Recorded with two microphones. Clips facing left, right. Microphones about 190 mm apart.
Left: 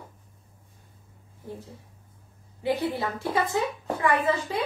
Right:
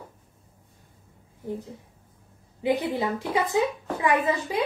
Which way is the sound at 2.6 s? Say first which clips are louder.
Right 2 dB; 20° right (ahead or behind).